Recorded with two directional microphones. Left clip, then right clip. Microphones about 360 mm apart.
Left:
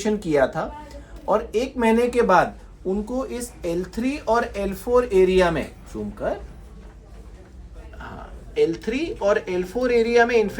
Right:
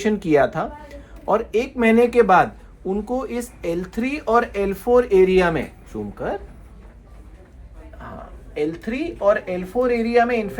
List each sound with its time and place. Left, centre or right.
0.0 s speech: right
8.7 s speech: centre